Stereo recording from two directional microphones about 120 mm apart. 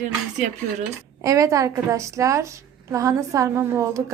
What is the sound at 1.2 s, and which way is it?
A woman's voice, 25° right (ahead or behind).